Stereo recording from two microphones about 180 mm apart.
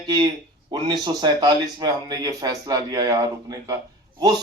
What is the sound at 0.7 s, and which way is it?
Speech, 25° right (ahead or behind).